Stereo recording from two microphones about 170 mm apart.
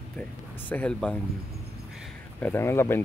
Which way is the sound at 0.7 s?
10° left (ahead or behind).